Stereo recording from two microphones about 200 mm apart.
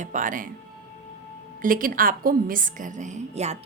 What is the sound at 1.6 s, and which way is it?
A woman's voice, 45° right (ahead or behind).